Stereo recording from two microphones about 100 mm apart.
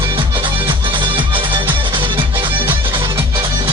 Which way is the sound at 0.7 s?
55° right (ahead or behind).